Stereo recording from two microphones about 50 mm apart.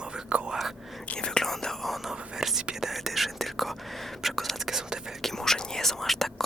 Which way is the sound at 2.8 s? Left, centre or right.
Centre.